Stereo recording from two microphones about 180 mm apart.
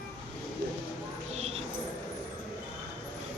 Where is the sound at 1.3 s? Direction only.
35° right (ahead or behind).